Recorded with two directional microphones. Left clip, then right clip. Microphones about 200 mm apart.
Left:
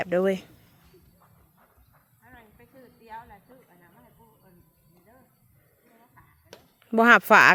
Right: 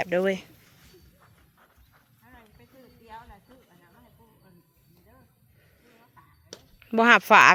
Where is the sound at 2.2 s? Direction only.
30° right (ahead or behind).